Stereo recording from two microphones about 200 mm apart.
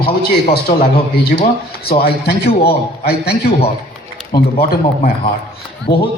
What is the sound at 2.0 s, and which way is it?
Speech, 50° left (ahead or behind).